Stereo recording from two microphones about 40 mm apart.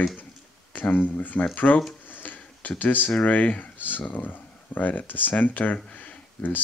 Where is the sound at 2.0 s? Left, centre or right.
Left.